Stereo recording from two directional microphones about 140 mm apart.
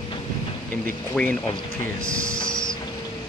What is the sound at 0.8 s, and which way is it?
Speech, 10° left (ahead or behind).